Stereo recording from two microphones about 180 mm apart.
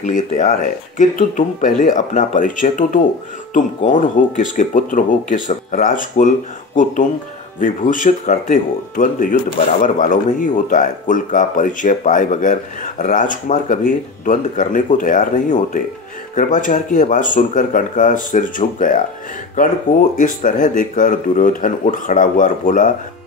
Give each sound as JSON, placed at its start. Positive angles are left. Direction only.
{"t": 0.0, "sound": "speech", "side_deg": 45}
{"t": 20.2, "sound": "speech", "side_deg": 45}